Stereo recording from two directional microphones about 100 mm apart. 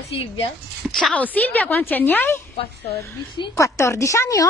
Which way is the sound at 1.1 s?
15° left (ahead or behind).